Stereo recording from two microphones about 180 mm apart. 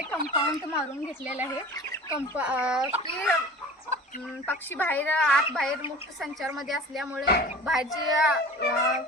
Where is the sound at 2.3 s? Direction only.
5° right (ahead or behind).